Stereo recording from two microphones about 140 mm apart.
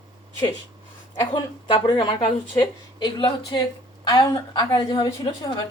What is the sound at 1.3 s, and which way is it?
A woman's voice, 35° left (ahead or behind).